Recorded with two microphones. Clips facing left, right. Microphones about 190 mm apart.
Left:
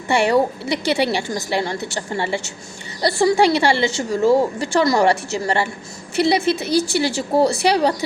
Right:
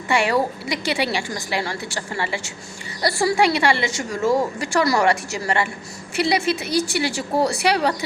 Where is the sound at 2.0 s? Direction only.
30° left (ahead or behind).